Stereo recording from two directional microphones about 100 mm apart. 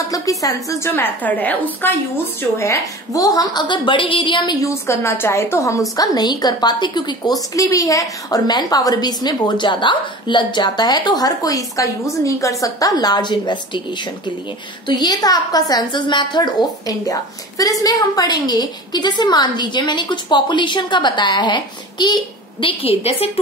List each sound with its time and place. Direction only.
0.1 s a woman's voice: 35° left (ahead or behind)
0.9 s a woman's voice: 15° left (ahead or behind)
2.5 s a woman's voice: 30° left (ahead or behind); by 4.6 s 55° left (ahead or behind)
4.6 s a woman's voice: 30° left (ahead or behind); by 7.3 s 50° left (ahead or behind)
7.5 s a woman's voice: 35° left (ahead or behind)
14.9 s a woman's voice: 45° left (ahead or behind)
22.7 s a woman's voice: 70° left (ahead or behind)